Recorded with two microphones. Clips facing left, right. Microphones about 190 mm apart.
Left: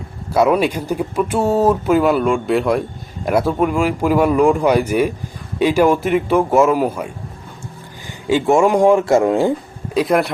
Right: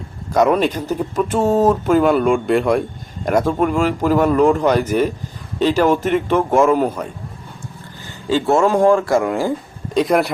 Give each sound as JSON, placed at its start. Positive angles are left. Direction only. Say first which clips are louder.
{"t": 0.3, "sound": "speech", "louder": "even", "side_deg": 5}
{"t": 8.3, "sound": "speech", "louder": "left 2 dB", "side_deg": 15}
{"t": 9.9, "sound": "a man's voice", "louder": "even", "side_deg": 0}